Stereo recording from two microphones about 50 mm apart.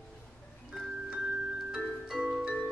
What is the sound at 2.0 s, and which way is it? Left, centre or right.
Music, centre.